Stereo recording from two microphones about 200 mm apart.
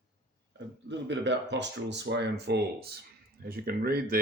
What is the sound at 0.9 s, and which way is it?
Speech, 60° right (ahead or behind).